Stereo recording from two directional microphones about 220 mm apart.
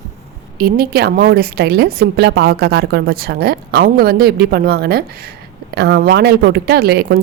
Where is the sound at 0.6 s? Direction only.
45° right (ahead or behind).